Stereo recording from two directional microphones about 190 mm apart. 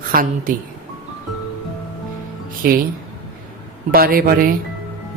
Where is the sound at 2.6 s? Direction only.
50° right (ahead or behind).